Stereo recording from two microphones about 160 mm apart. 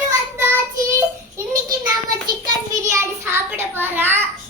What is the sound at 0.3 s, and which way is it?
Child singing, 15° right (ahead or behind).